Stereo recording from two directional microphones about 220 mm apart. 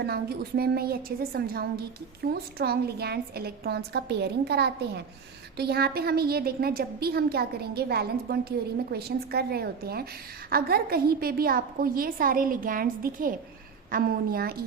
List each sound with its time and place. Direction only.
0.0 s a woman's voice: 45° right (ahead or behind)